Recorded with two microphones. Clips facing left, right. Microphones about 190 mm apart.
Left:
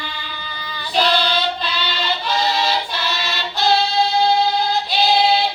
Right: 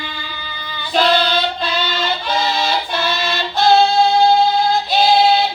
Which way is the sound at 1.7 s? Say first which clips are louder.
Right 4 dB; 45° right (ahead or behind).